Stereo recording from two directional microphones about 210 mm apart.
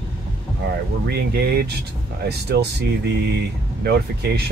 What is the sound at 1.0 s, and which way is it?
Speech, 50° right (ahead or behind).